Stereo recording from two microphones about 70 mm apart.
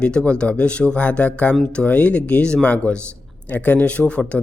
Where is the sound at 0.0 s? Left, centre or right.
Centre.